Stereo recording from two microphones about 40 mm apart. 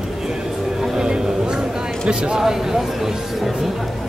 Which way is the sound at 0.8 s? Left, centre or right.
Centre.